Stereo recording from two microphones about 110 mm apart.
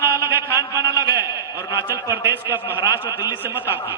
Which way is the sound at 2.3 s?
20° right (ahead or behind).